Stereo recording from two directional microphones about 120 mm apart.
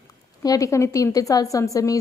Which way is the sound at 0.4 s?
30° left (ahead or behind).